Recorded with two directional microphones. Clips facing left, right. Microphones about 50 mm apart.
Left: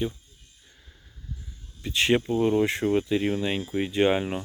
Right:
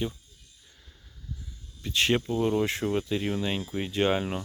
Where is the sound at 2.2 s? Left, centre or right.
Left.